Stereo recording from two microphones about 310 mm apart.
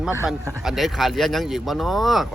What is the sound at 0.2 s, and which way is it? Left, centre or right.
Speech, centre.